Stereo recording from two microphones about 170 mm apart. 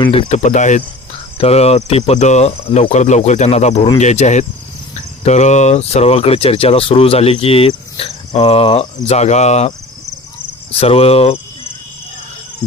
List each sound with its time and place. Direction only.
0.0 s speech: 30° left (ahead or behind)
0.3 s speech: 45° left (ahead or behind)
10.8 s speech: 35° left (ahead or behind)